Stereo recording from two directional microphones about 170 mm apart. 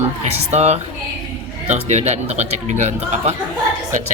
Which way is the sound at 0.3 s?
40° right (ahead or behind).